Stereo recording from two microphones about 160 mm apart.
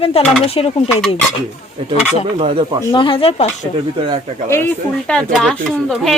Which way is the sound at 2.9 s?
30° left (ahead or behind).